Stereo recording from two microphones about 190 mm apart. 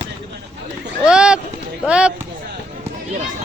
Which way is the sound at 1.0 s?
5° right (ahead or behind).